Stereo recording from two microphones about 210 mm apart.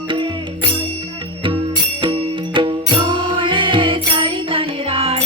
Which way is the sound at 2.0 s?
25° right (ahead or behind).